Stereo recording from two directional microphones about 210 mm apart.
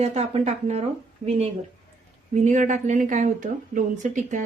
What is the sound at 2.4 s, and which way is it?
A woman's voice, 35° right (ahead or behind).